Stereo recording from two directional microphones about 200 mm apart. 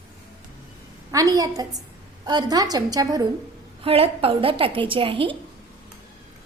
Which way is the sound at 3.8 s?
30° right (ahead or behind).